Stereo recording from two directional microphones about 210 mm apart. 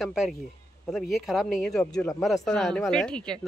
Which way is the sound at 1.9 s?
15° left (ahead or behind).